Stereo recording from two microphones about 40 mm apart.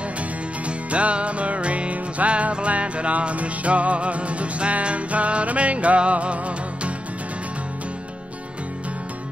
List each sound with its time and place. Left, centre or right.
0.7 s music: right